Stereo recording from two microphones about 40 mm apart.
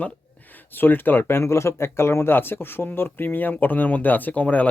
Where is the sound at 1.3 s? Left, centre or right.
Left.